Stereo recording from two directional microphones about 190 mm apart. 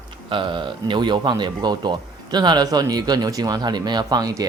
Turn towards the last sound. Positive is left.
turn(degrees=-20)  # may be behind; listen again after turning